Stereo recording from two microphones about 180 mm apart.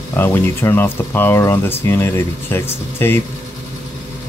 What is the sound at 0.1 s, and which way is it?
Speech, 15° left (ahead or behind).